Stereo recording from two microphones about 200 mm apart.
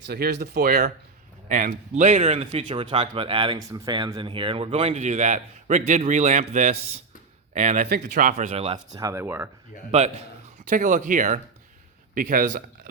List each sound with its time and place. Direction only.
0.0 s speech: 55° right (ahead or behind)
1.5 s speech: 40° right (ahead or behind)
9.0 s speech: 15° right (ahead or behind)
10.7 s speech: 40° right (ahead or behind)